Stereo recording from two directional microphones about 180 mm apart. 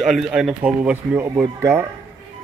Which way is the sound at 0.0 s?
Centre (ahead or behind).